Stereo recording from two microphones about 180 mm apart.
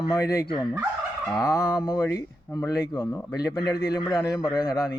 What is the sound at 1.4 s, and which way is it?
Speech, 20° left (ahead or behind).